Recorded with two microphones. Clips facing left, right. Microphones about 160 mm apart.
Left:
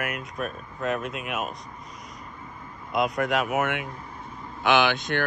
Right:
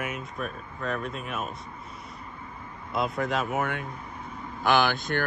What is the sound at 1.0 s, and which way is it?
Speech, 80° left.